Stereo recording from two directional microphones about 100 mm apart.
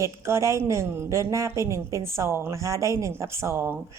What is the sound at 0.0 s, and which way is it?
Speech, 30° right (ahead or behind).